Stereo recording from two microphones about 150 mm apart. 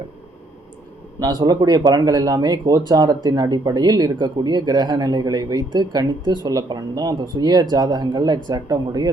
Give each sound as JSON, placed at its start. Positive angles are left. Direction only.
{"t": 1.2, "sound": "speech", "side_deg": -25}